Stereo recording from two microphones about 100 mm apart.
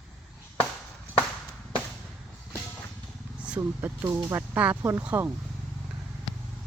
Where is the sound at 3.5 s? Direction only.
10° right (ahead or behind).